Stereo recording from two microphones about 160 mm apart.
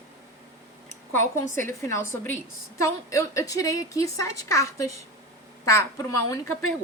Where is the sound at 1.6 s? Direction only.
15° left (ahead or behind).